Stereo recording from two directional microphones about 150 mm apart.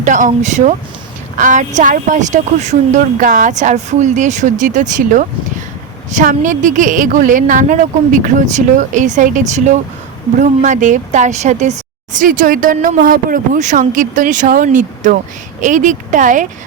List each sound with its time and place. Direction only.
0.0 s a woman's voice: 55° right (ahead or behind)